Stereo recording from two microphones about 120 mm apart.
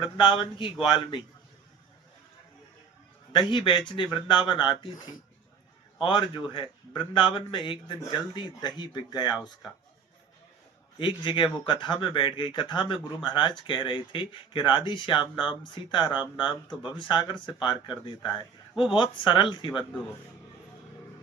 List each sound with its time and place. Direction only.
0.0 s speech: 45° left (ahead or behind)
3.3 s speech: 40° left (ahead or behind)
11.0 s speech: 45° left (ahead or behind)